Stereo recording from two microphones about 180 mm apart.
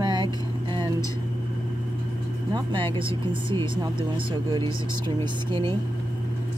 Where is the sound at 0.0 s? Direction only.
25° right (ahead or behind).